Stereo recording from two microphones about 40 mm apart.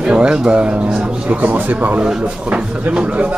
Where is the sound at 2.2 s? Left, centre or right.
Right.